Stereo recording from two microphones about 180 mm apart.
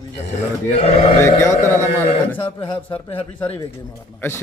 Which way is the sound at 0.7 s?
35° left (ahead or behind).